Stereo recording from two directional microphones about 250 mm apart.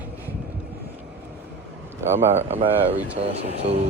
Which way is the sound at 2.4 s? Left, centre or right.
Right.